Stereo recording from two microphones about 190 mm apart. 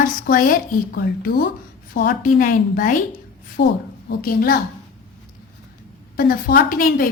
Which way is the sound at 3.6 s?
60° left (ahead or behind).